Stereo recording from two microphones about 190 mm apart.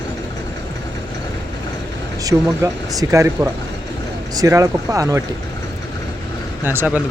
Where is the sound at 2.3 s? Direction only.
15° right (ahead or behind).